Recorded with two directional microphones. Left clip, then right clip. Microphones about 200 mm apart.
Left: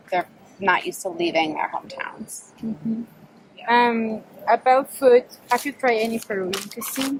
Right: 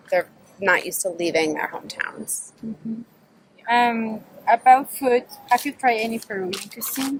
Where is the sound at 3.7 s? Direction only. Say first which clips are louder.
Left 1 dB; 5° right (ahead or behind).